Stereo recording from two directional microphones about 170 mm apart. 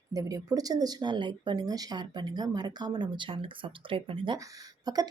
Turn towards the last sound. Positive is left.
turn(degrees=-25)  # may be behind; listen again after turning